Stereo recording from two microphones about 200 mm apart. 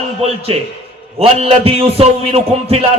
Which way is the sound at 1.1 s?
30° right (ahead or behind).